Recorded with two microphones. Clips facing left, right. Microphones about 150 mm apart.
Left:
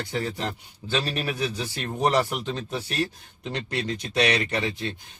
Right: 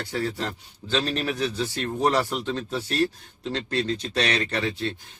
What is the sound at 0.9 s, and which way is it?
A man's voice, 10° left (ahead or behind).